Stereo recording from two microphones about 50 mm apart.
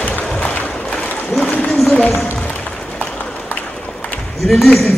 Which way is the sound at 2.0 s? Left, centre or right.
Left.